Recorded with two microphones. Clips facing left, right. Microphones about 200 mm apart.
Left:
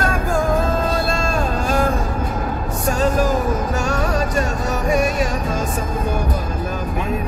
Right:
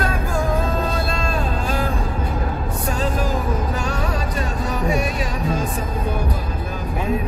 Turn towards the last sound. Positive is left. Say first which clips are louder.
# left 2 dB
turn(degrees=45)  # may be behind; listen again after turning